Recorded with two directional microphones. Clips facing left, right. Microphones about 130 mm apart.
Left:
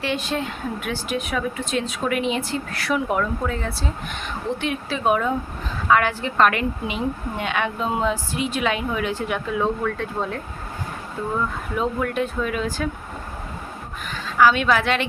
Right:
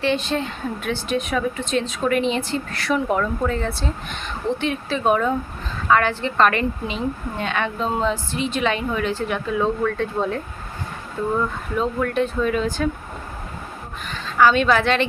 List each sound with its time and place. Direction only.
0.0 s a woman's voice: 10° left (ahead or behind)
11.7 s a woman's voice: 10° left (ahead or behind)
14.1 s a woman's voice: 5° left (ahead or behind)